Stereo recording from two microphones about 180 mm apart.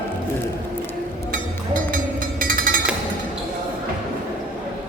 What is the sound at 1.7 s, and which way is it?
Music, 50° right (ahead or behind).